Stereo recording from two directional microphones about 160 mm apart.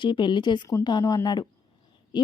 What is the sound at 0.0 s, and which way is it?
A woman's voice, 30° left (ahead or behind).